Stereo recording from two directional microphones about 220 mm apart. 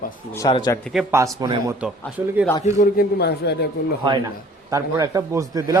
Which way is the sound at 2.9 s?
50° left (ahead or behind).